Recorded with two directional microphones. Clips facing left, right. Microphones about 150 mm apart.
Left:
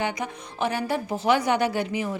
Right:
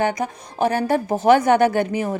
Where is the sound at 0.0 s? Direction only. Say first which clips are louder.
Right 7 dB; 45° right (ahead or behind).